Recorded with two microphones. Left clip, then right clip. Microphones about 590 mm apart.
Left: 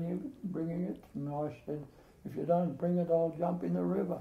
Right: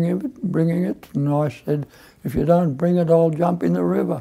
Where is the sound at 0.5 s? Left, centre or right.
Right.